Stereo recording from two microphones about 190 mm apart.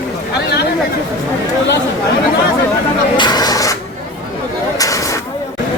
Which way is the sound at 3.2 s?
20° left (ahead or behind).